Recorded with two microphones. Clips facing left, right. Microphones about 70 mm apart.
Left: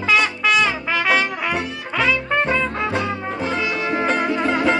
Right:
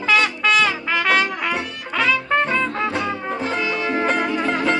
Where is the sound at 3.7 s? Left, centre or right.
Centre.